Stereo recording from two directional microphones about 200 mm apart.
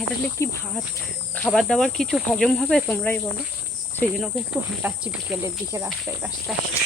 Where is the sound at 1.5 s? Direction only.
Centre (ahead or behind).